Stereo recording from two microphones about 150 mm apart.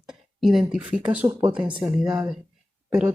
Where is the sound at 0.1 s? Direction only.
5° right (ahead or behind).